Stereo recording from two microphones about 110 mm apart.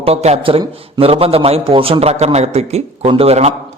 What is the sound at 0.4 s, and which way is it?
A man's voice, 55° right (ahead or behind).